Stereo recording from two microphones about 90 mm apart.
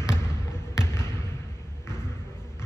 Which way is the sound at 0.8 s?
30° left (ahead or behind).